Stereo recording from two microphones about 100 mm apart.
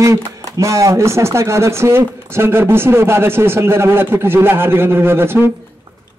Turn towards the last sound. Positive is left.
turn(degrees=-25)  # may be behind; listen again after turning